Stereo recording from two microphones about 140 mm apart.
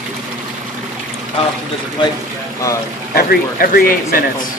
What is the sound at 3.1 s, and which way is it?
Speech, 90° left.